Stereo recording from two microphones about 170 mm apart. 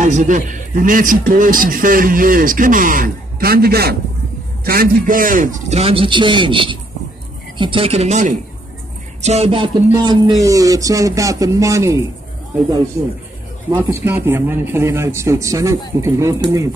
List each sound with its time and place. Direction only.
0.0 s a man's voice: 50° right (ahead or behind)
10.0 s speech: 20° right (ahead or behind)
13.7 s a man's voice: 15° right (ahead or behind)